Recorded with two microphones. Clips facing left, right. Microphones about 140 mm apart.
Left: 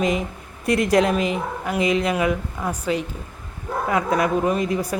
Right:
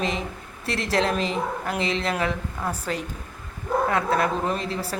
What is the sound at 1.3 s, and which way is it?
Speech, 10° left (ahead or behind).